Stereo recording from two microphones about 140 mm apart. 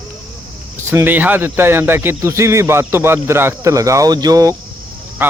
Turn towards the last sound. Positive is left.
turn(degrees=-15)  # may be behind; listen again after turning